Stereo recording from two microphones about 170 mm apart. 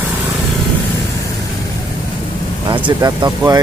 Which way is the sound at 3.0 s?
20° right (ahead or behind).